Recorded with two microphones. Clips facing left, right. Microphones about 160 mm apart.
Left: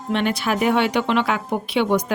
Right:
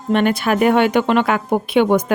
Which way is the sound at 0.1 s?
50° right (ahead or behind).